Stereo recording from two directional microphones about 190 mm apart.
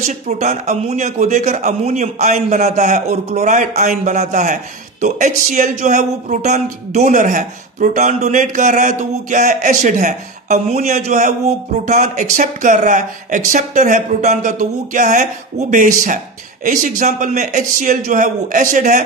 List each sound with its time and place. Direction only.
0.0 s a man's voice: 40° right (ahead or behind)
16.6 s a man's voice: 45° right (ahead or behind)